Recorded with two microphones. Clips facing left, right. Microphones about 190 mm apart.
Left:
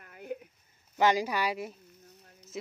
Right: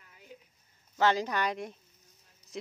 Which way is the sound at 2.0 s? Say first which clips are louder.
Left 11 dB; 65° left (ahead or behind).